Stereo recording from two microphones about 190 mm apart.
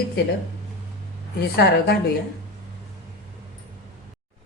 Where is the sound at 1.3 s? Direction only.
60° left (ahead or behind).